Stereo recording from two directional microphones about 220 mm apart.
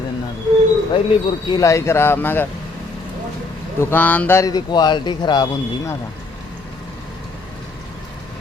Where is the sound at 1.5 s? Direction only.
15° left (ahead or behind).